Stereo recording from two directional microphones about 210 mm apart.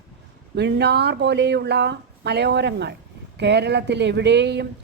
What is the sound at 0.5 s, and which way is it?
A man's voice, 55° right (ahead or behind).